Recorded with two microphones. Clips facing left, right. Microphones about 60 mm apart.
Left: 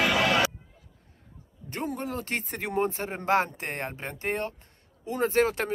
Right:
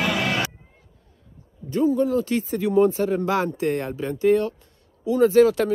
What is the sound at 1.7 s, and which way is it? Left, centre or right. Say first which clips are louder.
Speech: right 12 dB; left.